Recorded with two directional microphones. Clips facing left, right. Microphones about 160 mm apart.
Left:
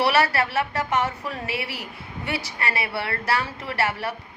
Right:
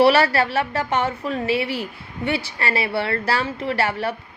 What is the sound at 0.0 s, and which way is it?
Speech, 30° right (ahead or behind).